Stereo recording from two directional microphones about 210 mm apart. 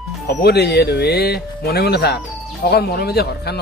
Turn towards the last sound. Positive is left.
turn(degrees=50)  # may be behind; listen again after turning